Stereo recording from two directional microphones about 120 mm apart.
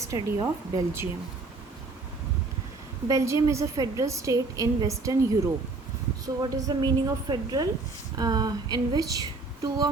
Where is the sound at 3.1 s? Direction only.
25° right (ahead or behind).